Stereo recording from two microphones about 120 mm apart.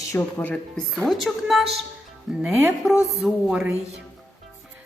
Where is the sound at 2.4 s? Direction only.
10° right (ahead or behind).